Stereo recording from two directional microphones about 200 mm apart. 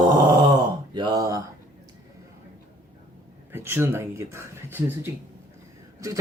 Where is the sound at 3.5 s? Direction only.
10° right (ahead or behind).